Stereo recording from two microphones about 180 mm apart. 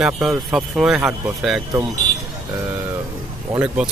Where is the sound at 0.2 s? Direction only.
5° right (ahead or behind).